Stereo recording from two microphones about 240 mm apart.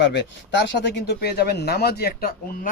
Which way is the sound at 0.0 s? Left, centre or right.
Left.